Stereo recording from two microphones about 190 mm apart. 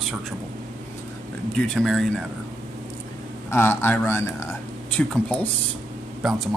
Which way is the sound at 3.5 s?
10° left (ahead or behind).